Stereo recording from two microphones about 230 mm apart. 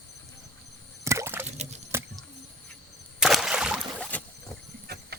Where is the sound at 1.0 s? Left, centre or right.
Centre.